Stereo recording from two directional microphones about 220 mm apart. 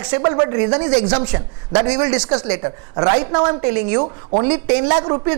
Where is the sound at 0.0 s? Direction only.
20° right (ahead or behind).